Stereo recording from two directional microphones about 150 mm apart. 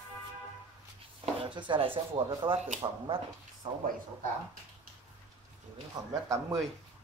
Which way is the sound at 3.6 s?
40° right (ahead or behind).